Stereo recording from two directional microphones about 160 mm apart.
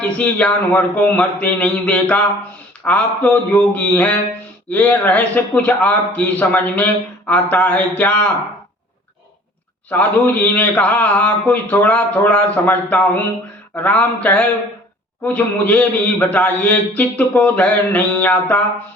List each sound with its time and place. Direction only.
0.0 s a man's voice: 10° left (ahead or behind)
9.9 s a man's voice: 10° left (ahead or behind)